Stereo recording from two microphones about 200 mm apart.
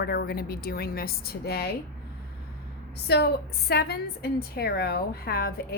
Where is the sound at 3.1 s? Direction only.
55° left (ahead or behind).